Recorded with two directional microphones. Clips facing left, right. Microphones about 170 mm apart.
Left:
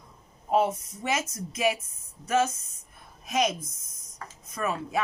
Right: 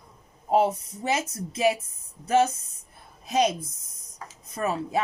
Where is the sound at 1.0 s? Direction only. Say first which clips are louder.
Right 2 dB; 30° right (ahead or behind).